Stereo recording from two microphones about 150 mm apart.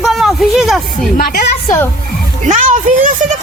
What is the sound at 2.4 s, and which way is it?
Speech, 55° right (ahead or behind).